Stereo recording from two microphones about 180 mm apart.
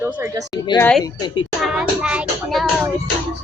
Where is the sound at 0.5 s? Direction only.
25° left (ahead or behind).